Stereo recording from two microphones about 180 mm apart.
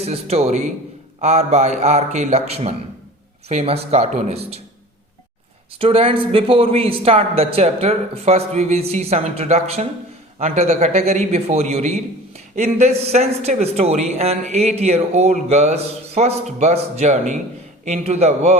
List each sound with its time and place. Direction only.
0.0 s a man's voice: 35° right (ahead or behind)
5.8 s a man's voice: 30° right (ahead or behind)